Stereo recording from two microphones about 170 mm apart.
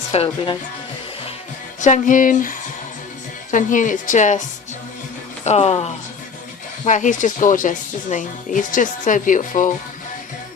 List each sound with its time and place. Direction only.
0.1 s speech: 35° left (ahead or behind)
1.8 s speech: 45° left (ahead or behind)
5.5 s speech: 35° left (ahead or behind)
6.8 s speech: 45° left (ahead or behind)